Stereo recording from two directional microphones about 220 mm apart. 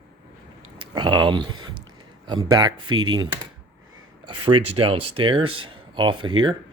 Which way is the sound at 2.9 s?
70° right (ahead or behind).